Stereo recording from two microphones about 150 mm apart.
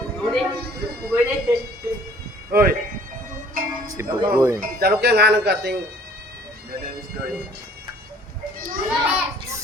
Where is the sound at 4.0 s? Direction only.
20° right (ahead or behind).